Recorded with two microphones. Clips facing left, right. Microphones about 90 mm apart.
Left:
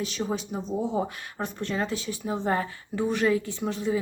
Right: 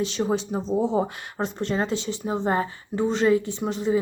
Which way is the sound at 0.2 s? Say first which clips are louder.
Right 5 dB; 30° right (ahead or behind).